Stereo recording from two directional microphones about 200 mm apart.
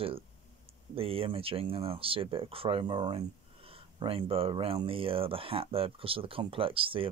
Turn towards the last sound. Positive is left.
turn(degrees=-25)  # may be behind; listen again after turning